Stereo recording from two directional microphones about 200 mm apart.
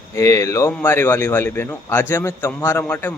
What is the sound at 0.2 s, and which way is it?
Speech, 15° left (ahead or behind).